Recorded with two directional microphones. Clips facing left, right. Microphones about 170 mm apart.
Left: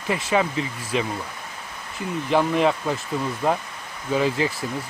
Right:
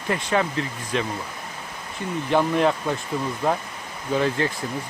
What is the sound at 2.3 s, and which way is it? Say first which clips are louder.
Speech: even; centre (ahead or behind).